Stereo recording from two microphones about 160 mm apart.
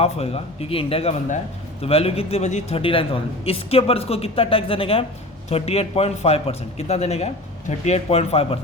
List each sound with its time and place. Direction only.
0.0 s a man's voice: 40° left (ahead or behind)